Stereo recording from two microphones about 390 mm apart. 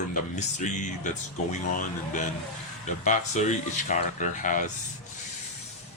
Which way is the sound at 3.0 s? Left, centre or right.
Centre.